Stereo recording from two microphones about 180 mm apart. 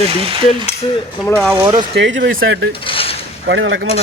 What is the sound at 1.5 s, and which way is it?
Speech, 15° right (ahead or behind).